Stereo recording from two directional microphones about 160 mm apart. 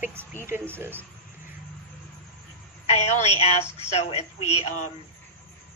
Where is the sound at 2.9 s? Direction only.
45° left (ahead or behind).